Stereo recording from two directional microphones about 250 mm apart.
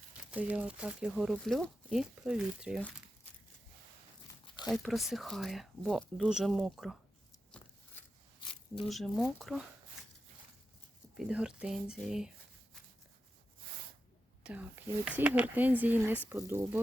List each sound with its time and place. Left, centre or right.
0.3 s speech: centre
4.4 s a sound: centre
4.7 s speech: centre
7.5 s biting: centre
8.9 s speech: centre
11.2 s speech: centre
14.4 s speech: centre